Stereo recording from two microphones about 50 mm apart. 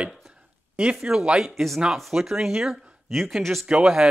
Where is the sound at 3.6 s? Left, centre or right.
Centre.